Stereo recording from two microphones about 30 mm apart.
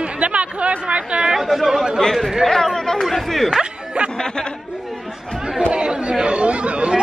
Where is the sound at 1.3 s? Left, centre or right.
Centre.